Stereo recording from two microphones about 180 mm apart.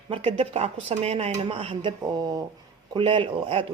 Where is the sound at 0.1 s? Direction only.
30° right (ahead or behind).